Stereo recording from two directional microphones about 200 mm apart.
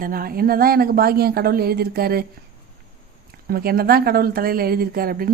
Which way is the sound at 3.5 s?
50° right (ahead or behind).